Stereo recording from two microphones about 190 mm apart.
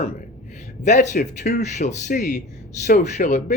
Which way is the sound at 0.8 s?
40° left (ahead or behind).